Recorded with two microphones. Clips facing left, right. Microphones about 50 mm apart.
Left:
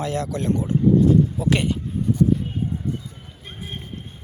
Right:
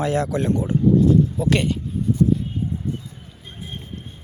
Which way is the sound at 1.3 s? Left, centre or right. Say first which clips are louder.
Right 1 dB; centre.